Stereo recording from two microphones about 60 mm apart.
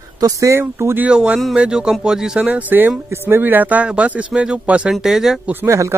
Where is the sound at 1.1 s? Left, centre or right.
Centre.